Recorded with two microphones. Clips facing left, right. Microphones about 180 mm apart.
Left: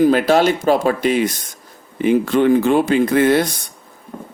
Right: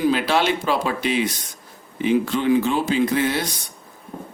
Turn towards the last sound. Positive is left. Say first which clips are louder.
# left 6 dB
turn(degrees=55)  # may be behind; listen again after turning